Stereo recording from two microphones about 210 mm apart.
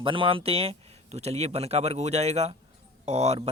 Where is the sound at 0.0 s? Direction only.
25° right (ahead or behind).